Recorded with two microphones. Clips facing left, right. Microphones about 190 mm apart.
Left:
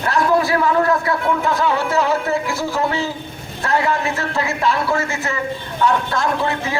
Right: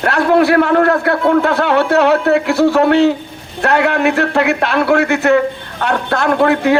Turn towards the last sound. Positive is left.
turn(degrees=-70)  # may be behind; listen again after turning